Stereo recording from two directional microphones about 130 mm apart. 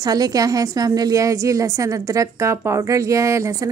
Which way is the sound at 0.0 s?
30° right (ahead or behind).